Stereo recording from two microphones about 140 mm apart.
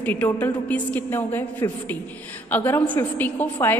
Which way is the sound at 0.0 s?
15° left (ahead or behind).